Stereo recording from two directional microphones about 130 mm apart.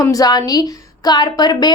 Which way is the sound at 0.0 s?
30° left (ahead or behind).